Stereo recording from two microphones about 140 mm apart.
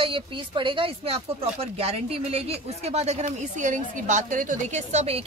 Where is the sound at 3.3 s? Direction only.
65° right (ahead or behind).